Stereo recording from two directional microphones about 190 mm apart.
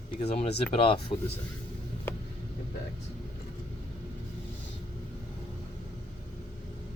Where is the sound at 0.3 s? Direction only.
35° left (ahead or behind).